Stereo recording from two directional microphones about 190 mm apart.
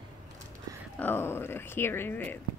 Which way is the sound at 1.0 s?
10° left (ahead or behind).